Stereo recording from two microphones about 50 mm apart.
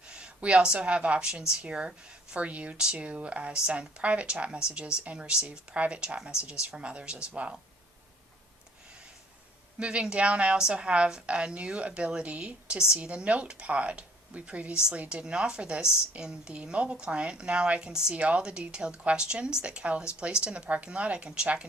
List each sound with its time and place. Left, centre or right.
0.1 s a woman's voice: centre
9.7 s a woman's voice: centre
15.2 s a woman's voice: centre